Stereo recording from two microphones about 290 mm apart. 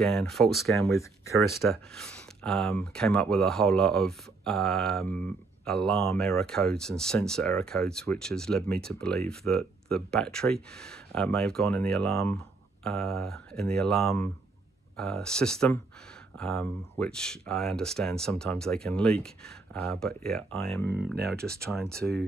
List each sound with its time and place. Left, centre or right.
0.0 s speech: centre
0.7 s speech: centre
21.4 s speech: right
21.9 s speech: centre